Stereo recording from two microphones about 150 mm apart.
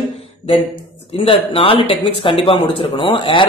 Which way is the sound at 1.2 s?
40° left (ahead or behind).